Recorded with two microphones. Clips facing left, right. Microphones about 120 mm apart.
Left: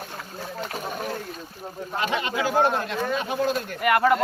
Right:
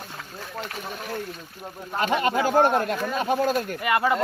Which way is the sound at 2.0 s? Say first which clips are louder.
Right 4 dB; 45° right (ahead or behind).